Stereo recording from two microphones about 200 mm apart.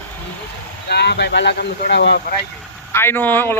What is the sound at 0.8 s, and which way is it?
Speech, 55° left (ahead or behind).